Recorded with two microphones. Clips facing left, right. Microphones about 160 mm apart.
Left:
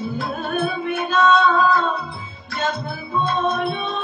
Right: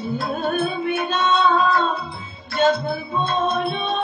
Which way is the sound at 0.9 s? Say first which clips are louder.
Left 6 dB; 30° right (ahead or behind).